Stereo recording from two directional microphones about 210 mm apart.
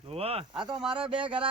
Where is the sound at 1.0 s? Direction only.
5° right (ahead or behind).